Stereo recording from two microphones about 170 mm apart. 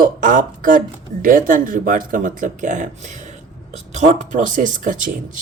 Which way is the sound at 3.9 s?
45° right (ahead or behind).